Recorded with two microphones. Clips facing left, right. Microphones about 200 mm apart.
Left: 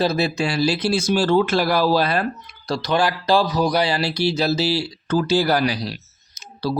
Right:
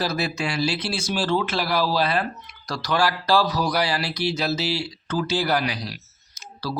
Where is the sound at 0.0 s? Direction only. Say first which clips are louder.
Left 5 dB; 25° left (ahead or behind); by 2.2 s 45° left (ahead or behind).